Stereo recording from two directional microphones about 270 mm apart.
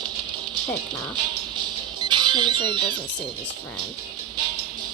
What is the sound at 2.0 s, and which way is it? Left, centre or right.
Music, centre.